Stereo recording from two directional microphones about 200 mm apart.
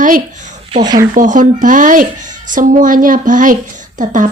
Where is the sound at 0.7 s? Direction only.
20° right (ahead or behind).